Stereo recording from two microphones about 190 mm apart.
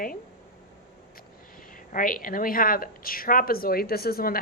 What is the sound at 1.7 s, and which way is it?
A woman's voice, 45° left (ahead or behind).